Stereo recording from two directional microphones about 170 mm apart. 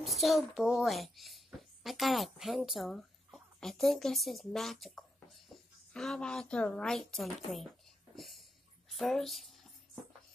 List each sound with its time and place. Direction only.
0.0 s speech: centre (ahead or behind)
8.2 s a sound: centre (ahead or behind)
8.9 s speech: centre (ahead or behind)